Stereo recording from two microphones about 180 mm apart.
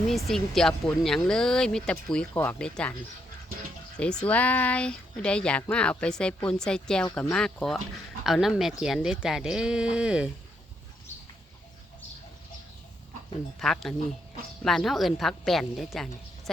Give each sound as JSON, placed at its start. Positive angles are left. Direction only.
{"t": 0.1, "sound": "speech", "side_deg": 0}
{"t": 3.9, "sound": "speech", "side_deg": 5}
{"t": 13.6, "sound": "speech", "side_deg": 0}